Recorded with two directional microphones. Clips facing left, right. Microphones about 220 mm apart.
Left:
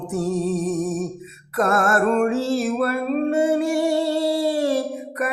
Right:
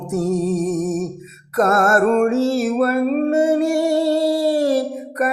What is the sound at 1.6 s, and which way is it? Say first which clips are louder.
Music: right 4 dB; 40° right (ahead or behind).